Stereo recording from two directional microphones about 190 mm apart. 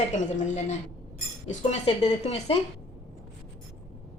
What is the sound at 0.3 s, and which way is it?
Speech, 40° left (ahead or behind).